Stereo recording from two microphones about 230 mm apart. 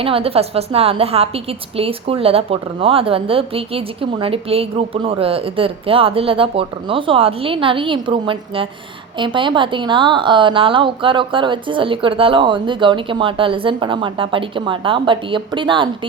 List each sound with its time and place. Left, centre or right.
0.0 s a woman's voice: right